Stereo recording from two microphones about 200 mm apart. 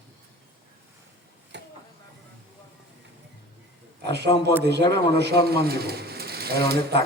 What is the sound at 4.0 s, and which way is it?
A man's voice, 60° right (ahead or behind).